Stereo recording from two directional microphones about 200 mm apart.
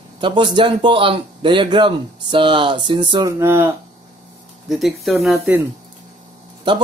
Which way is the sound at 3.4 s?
10° right (ahead or behind).